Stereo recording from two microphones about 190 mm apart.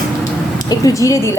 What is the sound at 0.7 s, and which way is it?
Speech, 20° left (ahead or behind).